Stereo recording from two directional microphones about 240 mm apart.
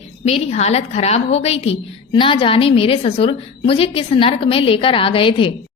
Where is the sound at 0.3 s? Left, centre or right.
Left.